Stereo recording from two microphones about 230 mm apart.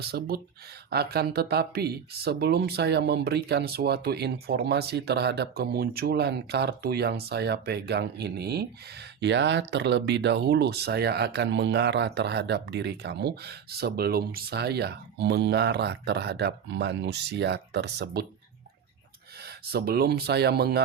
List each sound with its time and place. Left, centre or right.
0.0 s speech: right
19.4 s speech: right